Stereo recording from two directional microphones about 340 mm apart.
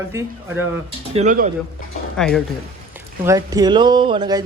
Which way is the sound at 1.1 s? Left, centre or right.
Right.